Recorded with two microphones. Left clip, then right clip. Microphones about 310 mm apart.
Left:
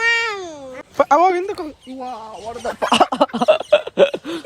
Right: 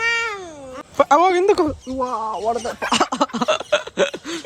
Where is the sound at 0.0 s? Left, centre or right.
Left.